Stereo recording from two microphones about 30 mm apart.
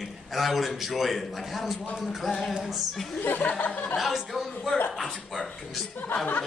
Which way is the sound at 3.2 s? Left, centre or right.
Left.